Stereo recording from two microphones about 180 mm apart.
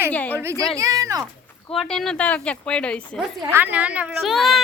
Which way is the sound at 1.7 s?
Centre (ahead or behind).